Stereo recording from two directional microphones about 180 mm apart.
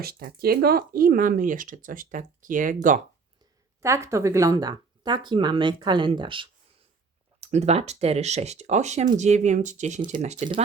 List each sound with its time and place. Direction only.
0.0 s speech: 60° right (ahead or behind)
3.8 s speech: 15° right (ahead or behind); by 10.3 s 40° right (ahead or behind)